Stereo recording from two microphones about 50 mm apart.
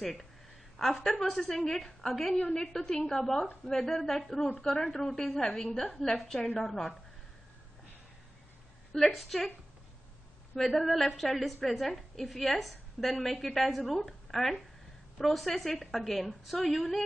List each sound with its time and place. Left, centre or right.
0.0 s a woman's voice: centre
2.3 s a woman's voice: centre
8.9 s a woman's voice: centre
10.5 s a woman's voice: centre